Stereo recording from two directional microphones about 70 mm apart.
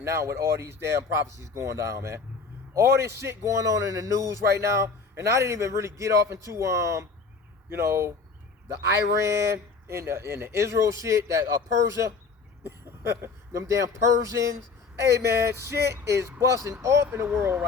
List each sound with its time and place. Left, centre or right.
0.0 s a man's voice: right
12.6 s a man's voice: right